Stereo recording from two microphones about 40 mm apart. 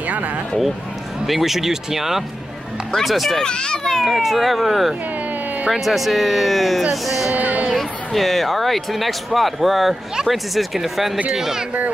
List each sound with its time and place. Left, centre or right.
0.0 s music: right
1.2 s speech: centre
3.4 s a child's voice: left
4.0 s speech: centre
7.3 s a sound: right
7.7 s speech: centre